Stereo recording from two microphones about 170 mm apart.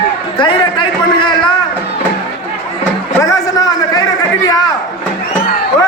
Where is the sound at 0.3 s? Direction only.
30° left (ahead or behind).